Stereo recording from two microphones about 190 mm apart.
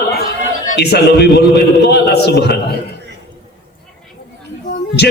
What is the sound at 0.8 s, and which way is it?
A man's voice, 60° left (ahead or behind).